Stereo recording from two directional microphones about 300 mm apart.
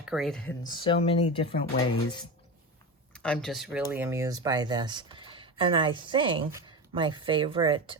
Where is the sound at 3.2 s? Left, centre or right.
Centre.